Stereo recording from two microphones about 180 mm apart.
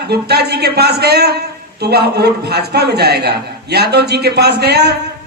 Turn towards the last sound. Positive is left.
turn(degrees=-65)  # may be behind; listen again after turning